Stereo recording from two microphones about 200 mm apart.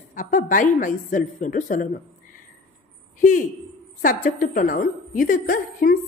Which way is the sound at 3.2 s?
40° left (ahead or behind).